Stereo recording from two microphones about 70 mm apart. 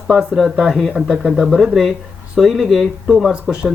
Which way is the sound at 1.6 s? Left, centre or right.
Centre.